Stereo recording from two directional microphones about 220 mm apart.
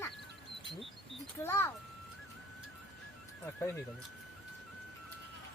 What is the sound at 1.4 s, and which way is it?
Speech, 10° left (ahead or behind).